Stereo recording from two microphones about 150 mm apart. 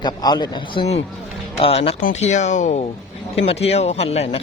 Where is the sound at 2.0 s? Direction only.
55° left (ahead or behind).